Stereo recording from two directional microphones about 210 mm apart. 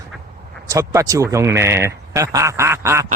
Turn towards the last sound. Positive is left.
turn(degrees=-15)  # may be behind; listen again after turning